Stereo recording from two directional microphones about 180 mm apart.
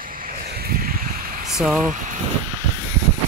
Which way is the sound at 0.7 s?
55° right (ahead or behind).